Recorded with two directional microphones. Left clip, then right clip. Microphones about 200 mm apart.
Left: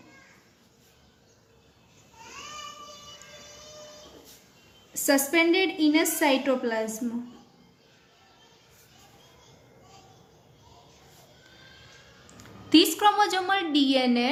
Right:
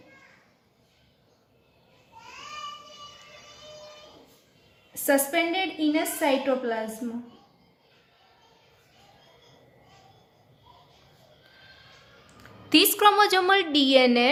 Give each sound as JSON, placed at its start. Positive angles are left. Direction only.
{"t": 5.0, "sound": "a woman's voice", "side_deg": -25}
{"t": 12.7, "sound": "a woman's voice", "side_deg": -25}